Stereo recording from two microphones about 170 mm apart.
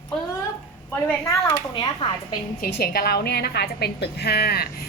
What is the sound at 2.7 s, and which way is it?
A woman's voice, 65° left (ahead or behind).